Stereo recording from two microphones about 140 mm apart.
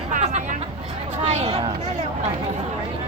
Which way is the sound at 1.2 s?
50° right (ahead or behind).